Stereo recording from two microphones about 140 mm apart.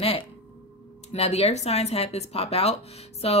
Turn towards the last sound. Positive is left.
turn(degrees=45)  # may be behind; listen again after turning